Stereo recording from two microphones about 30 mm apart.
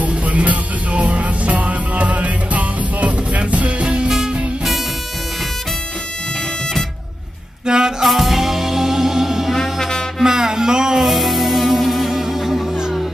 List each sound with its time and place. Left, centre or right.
0.1 s music: right
7.6 s music: right
8.0 s music: centre
9.6 s music: centre
10.2 s music: centre
11.0 s music: centre